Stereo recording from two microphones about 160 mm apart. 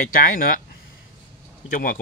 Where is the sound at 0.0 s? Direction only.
60° left (ahead or behind).